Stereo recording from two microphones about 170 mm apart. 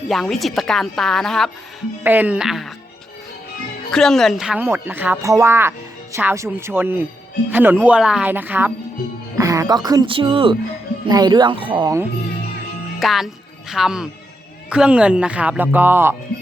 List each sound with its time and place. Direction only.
0.1 s a woman's voice: centre (ahead or behind)
2.0 s a woman's voice: 10° right (ahead or behind)
3.9 s speech: centre (ahead or behind); by 11.9 s 25° right (ahead or behind)
13.0 s speech: centre (ahead or behind)